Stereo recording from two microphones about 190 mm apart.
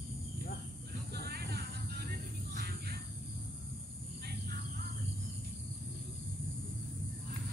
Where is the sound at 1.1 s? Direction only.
55° right (ahead or behind).